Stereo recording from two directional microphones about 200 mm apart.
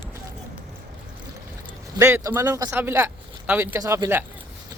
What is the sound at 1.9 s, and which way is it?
Speech, 15° right (ahead or behind).